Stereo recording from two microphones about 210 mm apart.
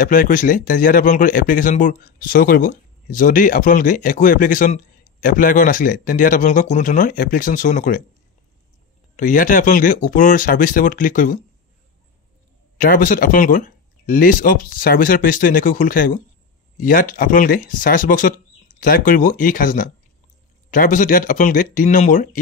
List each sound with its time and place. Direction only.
0.0 s speech: 40° left (ahead or behind)
9.1 s speech: 40° left (ahead or behind)
12.7 s speech: 40° left (ahead or behind)